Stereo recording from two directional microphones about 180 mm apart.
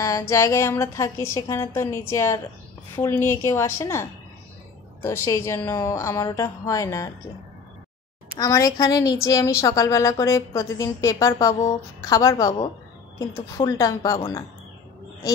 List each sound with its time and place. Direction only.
0.3 s a woman's voice: 15° left (ahead or behind)
8.4 s a woman's voice: 20° left (ahead or behind)